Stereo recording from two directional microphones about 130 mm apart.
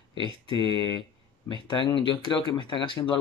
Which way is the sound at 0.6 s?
35° left (ahead or behind).